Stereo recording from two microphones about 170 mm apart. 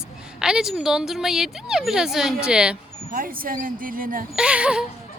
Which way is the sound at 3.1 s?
55° right (ahead or behind).